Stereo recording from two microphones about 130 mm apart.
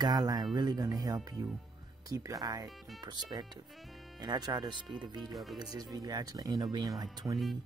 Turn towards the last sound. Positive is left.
turn(degrees=-20)  # may be behind; listen again after turning